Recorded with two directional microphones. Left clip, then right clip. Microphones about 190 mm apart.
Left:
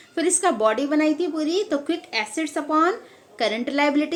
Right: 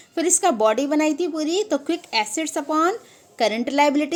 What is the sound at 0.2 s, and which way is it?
Speech, 40° right (ahead or behind).